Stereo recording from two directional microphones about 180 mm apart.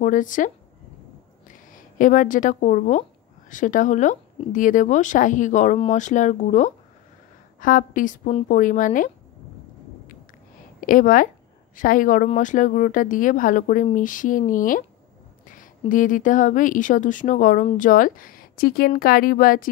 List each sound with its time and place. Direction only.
0.0 s speech: 45° left (ahead or behind)
2.0 s speech: 45° left (ahead or behind)
10.8 s a woman's voice: 50° left (ahead or behind)
15.9 s speech: 45° left (ahead or behind)